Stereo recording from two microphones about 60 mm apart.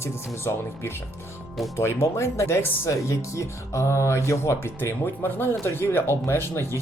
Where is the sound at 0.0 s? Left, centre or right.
Left.